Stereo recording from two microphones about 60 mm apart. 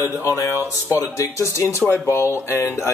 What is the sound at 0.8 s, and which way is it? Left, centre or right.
Speech, left.